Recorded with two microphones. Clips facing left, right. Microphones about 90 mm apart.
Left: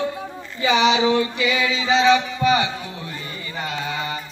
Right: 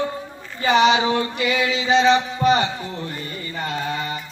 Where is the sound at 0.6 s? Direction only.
50° right (ahead or behind).